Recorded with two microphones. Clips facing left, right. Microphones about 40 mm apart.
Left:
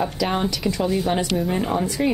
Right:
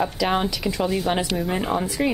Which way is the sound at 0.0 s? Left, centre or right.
Centre.